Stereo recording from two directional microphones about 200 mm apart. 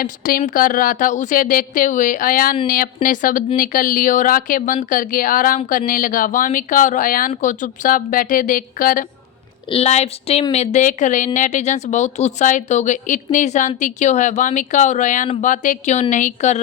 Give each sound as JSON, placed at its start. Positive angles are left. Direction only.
{"t": 0.0, "sound": "speech", "side_deg": 45}
{"t": 9.6, "sound": "speech", "side_deg": 30}